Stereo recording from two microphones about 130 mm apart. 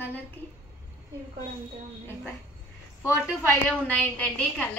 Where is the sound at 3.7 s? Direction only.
10° left (ahead or behind).